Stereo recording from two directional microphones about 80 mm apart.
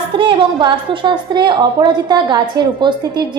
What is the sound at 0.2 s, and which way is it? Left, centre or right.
A woman's voice, right.